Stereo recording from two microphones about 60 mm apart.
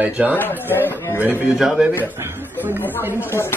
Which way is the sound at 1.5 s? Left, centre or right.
Centre.